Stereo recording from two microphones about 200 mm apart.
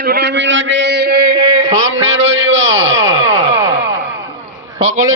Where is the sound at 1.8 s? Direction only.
70° right (ahead or behind).